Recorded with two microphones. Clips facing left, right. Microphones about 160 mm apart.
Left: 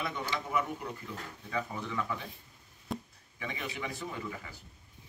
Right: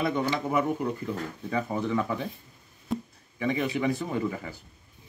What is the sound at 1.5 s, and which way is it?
Speech, 45° right (ahead or behind).